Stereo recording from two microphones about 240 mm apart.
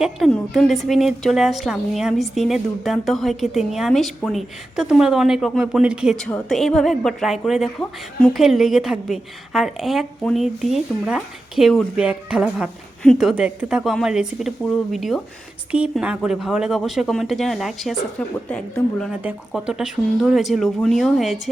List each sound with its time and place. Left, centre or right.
0.0 s a woman's voice: centre